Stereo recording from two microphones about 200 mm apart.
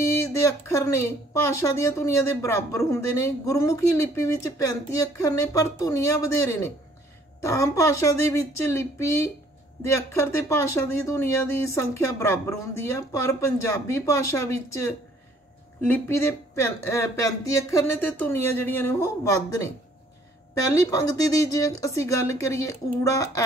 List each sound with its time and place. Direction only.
0.0 s speech: 15° left (ahead or behind)